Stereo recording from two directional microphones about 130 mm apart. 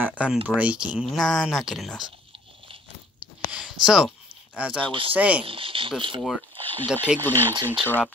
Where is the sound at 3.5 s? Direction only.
5° right (ahead or behind).